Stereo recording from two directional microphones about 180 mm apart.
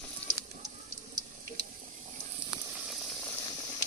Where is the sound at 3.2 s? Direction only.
15° left (ahead or behind).